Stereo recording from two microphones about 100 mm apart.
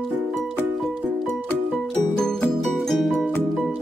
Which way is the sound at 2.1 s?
5° left (ahead or behind).